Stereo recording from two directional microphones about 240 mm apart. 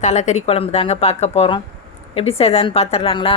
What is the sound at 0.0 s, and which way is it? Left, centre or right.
A woman's voice, left.